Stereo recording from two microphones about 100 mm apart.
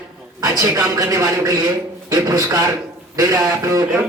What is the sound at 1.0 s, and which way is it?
A man's voice, 30° right (ahead or behind).